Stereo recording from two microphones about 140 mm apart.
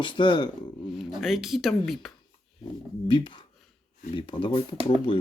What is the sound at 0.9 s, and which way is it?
Speech, centre (ahead or behind).